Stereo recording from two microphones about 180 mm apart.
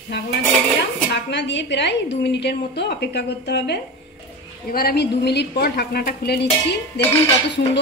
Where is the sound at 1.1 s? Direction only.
75° left (ahead or behind).